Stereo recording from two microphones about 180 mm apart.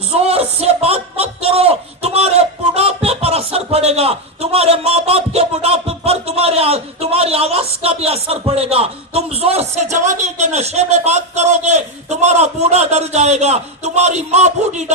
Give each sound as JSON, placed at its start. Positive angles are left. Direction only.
{"t": 0.2, "sound": "speech", "side_deg": -35}